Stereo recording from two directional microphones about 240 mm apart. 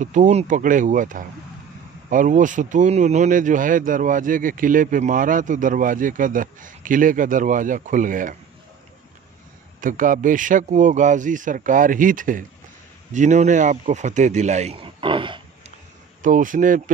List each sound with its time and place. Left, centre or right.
0.0 s speech: right
9.8 s speech: right
16.2 s speech: right